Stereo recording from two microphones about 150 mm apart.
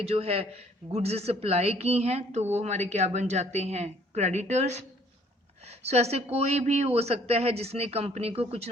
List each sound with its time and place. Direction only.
0.0 s a woman's voice: 40° right (ahead or behind)